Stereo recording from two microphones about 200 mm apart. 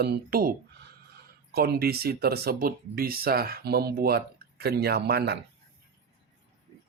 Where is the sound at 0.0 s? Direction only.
45° right (ahead or behind).